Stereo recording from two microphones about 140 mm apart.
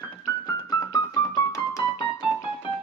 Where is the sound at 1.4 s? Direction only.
25° left (ahead or behind).